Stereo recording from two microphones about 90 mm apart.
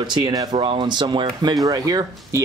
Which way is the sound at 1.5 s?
40° right (ahead or behind).